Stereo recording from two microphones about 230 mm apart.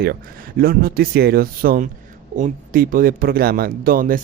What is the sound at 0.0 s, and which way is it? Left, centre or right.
Speech, right.